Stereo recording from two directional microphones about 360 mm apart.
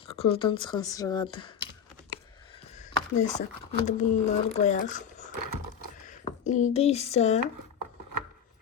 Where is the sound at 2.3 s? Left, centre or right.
Centre.